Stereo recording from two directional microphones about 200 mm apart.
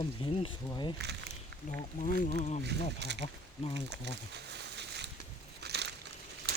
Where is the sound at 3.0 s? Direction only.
60° right (ahead or behind).